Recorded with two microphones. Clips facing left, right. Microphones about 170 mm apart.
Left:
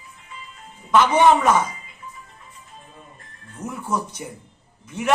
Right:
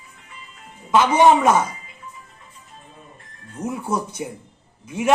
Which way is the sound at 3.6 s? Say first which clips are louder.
Right 4 dB; 30° right (ahead or behind).